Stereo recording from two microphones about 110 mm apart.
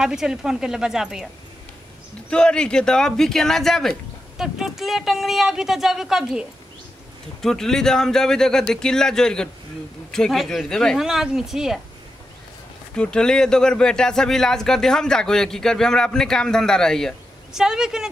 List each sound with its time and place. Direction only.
0.0 s speech: 5° right (ahead or behind)
2.2 s speech: 10° left (ahead or behind)
7.4 s speech: 5° left (ahead or behind)
12.9 s speech: 10° left (ahead or behind)
17.5 s speech: 5° right (ahead or behind)